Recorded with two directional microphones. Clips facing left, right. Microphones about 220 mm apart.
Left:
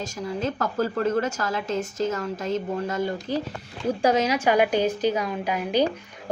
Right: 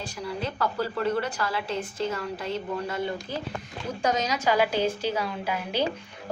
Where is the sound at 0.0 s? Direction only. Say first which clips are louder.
Left 4 dB; 45° left (ahead or behind).